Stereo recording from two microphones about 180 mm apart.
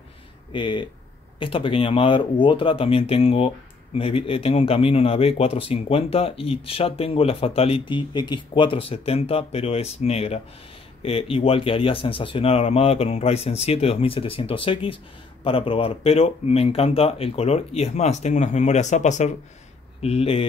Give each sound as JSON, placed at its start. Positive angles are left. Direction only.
{"t": 0.5, "sound": "speech", "side_deg": 25}